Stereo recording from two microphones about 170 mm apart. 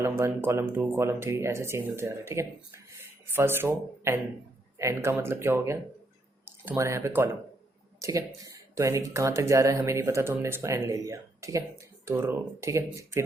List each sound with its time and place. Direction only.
0.0 s speech: 15° right (ahead or behind)